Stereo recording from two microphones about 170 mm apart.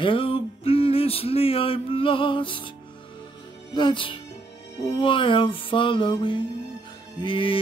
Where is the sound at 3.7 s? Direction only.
30° left (ahead or behind).